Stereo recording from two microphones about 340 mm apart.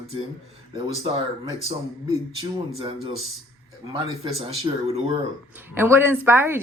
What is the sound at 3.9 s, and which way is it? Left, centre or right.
Speech, centre.